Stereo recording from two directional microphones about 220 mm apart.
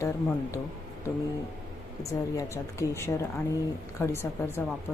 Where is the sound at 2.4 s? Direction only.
15° left (ahead or behind).